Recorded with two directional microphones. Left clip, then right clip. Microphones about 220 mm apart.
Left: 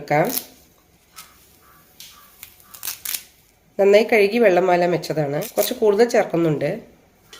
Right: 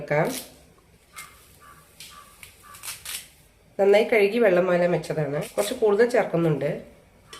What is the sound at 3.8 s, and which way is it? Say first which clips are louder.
Speech: left 4 dB; 40° left (ahead or behind).